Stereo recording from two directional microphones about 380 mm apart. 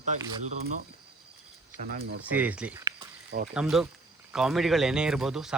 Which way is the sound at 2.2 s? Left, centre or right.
Centre.